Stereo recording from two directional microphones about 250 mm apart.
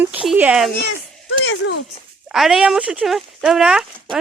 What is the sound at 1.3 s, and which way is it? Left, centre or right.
Speech, left.